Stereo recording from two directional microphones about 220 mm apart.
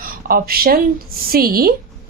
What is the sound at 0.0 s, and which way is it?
A woman's voice, 40° right (ahead or behind).